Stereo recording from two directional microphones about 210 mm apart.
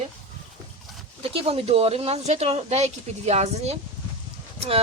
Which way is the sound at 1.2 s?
25° right (ahead or behind).